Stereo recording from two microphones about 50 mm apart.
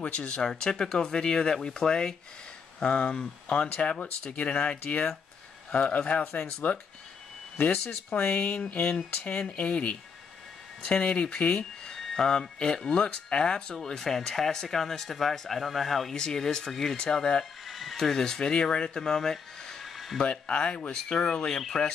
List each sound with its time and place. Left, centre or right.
0.0 s speech: left
0.4 s speech: centre; by 6.8 s left
8.3 s speech: left; by 17.5 s centre
17.6 s a sound: centre
17.9 s speech: centre
20.2 s speech: left